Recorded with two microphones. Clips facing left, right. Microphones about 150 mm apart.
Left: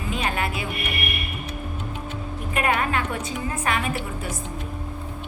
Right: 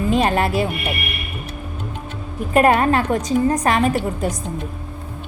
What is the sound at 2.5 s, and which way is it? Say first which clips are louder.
A woman's voice: right 9 dB; 40° right (ahead or behind).